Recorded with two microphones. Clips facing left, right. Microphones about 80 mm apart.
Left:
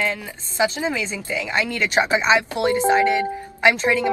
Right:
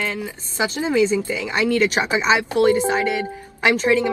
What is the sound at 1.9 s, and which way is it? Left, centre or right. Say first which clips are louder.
A woman's voice: left 1 dB; left.